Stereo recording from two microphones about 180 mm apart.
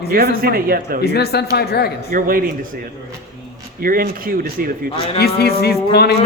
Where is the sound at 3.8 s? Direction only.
55° right (ahead or behind).